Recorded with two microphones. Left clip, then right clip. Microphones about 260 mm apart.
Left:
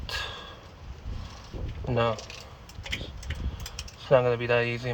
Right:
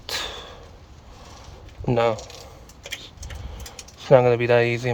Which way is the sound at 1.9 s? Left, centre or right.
Right.